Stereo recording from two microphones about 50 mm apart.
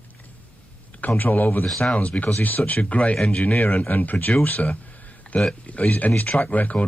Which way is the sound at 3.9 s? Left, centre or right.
Left.